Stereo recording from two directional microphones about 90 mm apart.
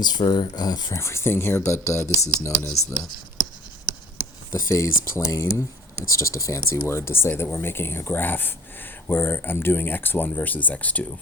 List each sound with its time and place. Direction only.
0.0 s speech: 55° left (ahead or behind)
0.9 s speech: 30° left (ahead or behind)
4.5 s speech: 35° left (ahead or behind); by 11.0 s 15° left (ahead or behind)